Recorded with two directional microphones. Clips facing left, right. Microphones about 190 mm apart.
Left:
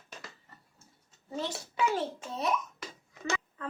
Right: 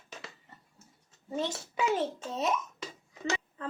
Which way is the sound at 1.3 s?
20° right (ahead or behind).